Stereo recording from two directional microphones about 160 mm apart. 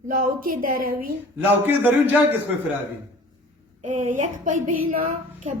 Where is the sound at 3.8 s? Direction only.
50° right (ahead or behind).